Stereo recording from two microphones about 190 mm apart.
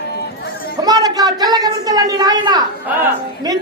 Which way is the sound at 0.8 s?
20° right (ahead or behind).